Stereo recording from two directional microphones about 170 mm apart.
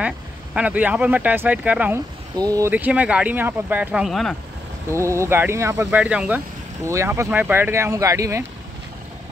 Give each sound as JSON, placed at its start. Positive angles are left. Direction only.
{"t": 0.6, "sound": "speech", "side_deg": -10}
{"t": 4.9, "sound": "speech", "side_deg": -15}